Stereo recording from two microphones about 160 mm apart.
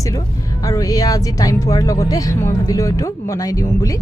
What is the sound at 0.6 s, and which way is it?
Speech, 20° left (ahead or behind).